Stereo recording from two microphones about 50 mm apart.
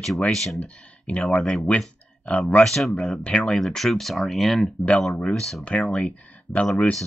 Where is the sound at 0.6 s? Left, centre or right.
Left.